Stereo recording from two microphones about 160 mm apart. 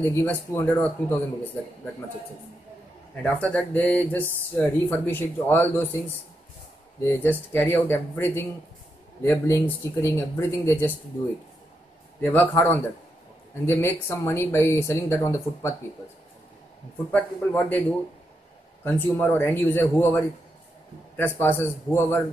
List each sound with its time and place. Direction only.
0.0 s speech: 15° left (ahead or behind)
3.2 s speech: 10° left (ahead or behind)
7.1 s speech: 10° left (ahead or behind)
12.2 s speech: 10° left (ahead or behind)
17.1 s speech: 10° left (ahead or behind)